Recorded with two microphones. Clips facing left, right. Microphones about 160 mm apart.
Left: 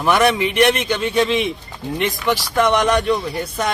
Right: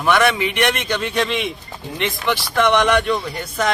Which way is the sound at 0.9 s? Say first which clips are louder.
Left 3 dB; 5° left (ahead or behind).